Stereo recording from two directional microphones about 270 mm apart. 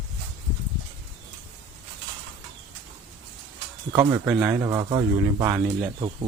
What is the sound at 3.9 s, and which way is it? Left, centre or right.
Speech, centre.